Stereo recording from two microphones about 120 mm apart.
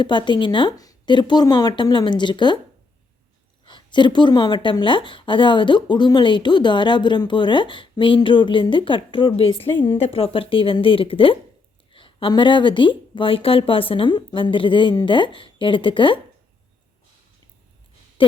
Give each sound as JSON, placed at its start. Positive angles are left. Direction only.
{"t": 0.0, "sound": "a woman's voice", "side_deg": 40}
{"t": 3.7, "sound": "speech", "side_deg": 40}
{"t": 18.2, "sound": "a sound", "side_deg": 45}